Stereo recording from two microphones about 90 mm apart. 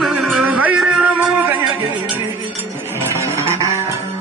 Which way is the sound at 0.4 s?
15° right (ahead or behind).